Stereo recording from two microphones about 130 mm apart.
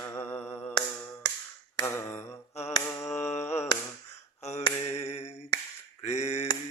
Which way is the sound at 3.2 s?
60° left (ahead or behind).